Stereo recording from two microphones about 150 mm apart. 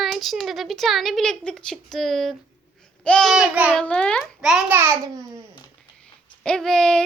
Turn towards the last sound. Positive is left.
turn(degrees=5)  # may be behind; listen again after turning